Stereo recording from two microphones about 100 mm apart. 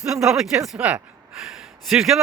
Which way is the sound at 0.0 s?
5° right (ahead or behind).